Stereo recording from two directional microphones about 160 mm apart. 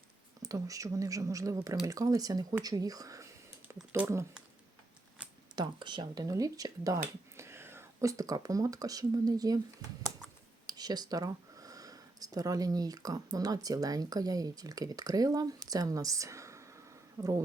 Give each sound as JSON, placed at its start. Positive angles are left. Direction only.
{"t": 0.4, "sound": "speech", "side_deg": -20}
{"t": 3.7, "sound": "a sound", "side_deg": -20}
{"t": 4.0, "sound": "speech", "side_deg": -15}
{"t": 5.5, "sound": "speech", "side_deg": -30}
{"t": 10.7, "sound": "speech", "side_deg": -25}